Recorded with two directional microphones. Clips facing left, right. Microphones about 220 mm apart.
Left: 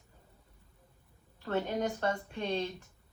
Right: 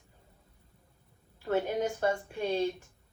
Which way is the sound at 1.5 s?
10° right (ahead or behind).